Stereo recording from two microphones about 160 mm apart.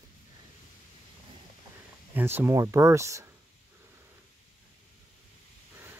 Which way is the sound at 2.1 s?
10° right (ahead or behind).